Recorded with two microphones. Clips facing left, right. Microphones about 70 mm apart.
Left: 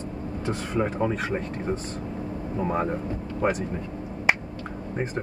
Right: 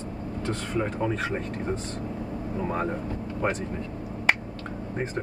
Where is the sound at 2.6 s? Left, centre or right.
Centre.